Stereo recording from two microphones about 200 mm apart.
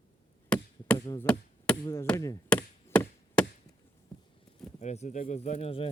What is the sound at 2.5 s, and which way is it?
Chop, 10° left (ahead or behind).